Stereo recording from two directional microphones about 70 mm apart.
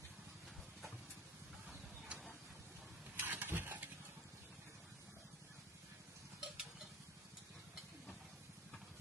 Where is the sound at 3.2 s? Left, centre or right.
Right.